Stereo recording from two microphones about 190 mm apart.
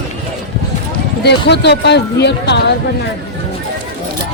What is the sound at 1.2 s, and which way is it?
Speech, 65° left (ahead or behind).